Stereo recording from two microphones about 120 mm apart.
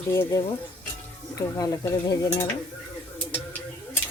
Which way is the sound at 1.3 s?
30° left (ahead or behind).